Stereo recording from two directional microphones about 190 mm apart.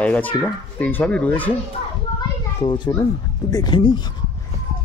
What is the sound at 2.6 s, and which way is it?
Speech, 20° left (ahead or behind).